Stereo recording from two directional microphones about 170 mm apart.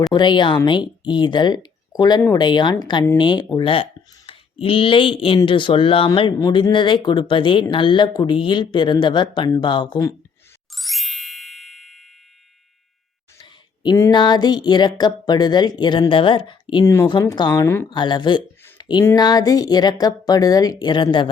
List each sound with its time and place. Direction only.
0.1 s speech: 25° left (ahead or behind)
10.8 s ding: centre (ahead or behind)
14.1 s speech: 25° left (ahead or behind)
17.8 s speech: 25° left (ahead or behind)
18.8 s a sound: 25° left (ahead or behind)
19.0 s speech: 25° left (ahead or behind)